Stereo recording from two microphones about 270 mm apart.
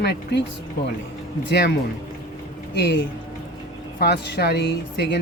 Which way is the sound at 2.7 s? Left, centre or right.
Left.